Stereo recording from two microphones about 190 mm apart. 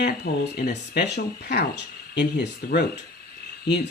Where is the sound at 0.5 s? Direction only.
60° left (ahead or behind).